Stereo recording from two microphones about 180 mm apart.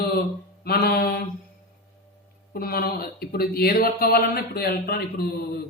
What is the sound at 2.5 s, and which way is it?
Speech, 55° left (ahead or behind).